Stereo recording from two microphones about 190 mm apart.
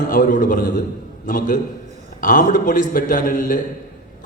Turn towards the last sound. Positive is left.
turn(degrees=45)  # may be behind; listen again after turning